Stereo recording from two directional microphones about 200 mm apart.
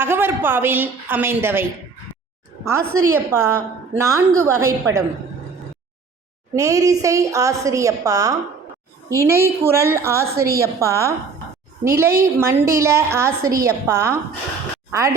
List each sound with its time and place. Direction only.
0.0 s a woman's voice: 10° right (ahead or behind)
2.6 s a woman's voice: 15° right (ahead or behind)
6.5 s a woman's voice: 15° right (ahead or behind)